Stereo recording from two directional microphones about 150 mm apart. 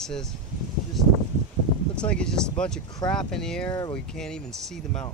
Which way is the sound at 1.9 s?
5° left (ahead or behind).